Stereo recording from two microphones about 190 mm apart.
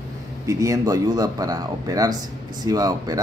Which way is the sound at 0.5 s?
15° right (ahead or behind).